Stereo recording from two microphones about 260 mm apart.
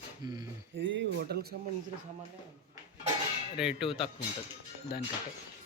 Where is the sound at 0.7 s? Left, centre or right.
Right.